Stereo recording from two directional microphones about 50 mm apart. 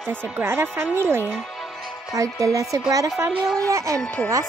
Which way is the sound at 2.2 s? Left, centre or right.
Right.